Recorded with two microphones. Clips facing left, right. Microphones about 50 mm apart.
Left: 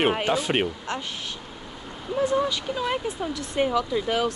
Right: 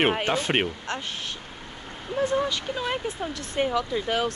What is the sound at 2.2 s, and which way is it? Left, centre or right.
Speech, right.